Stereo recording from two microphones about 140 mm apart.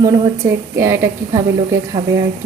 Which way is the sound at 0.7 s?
20° right (ahead or behind).